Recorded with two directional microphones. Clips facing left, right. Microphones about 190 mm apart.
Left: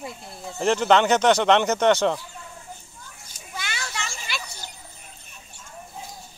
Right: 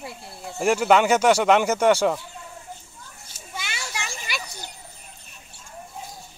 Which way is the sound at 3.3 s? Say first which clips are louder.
Left 1 dB; 5° right (ahead or behind).